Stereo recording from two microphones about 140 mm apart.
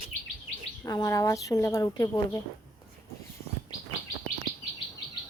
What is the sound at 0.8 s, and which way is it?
Speech, 25° left (ahead or behind).